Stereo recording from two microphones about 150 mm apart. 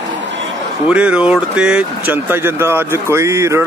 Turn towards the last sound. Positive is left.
turn(degrees=-20)  # may be behind; listen again after turning